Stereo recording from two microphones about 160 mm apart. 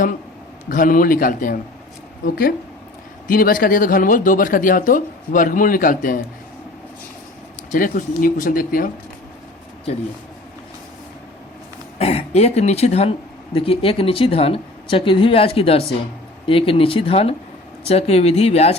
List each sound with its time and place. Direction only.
0.7 s speech: 60° left (ahead or behind)
7.7 s speech: 60° left (ahead or behind)
11.9 s speech: 40° left (ahead or behind)